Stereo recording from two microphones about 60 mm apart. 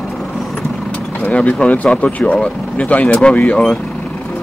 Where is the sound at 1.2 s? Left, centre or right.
Left.